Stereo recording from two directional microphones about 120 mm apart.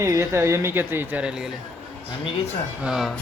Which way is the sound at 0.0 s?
25° right (ahead or behind).